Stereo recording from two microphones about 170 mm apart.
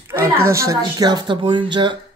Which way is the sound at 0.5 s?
20° right (ahead or behind).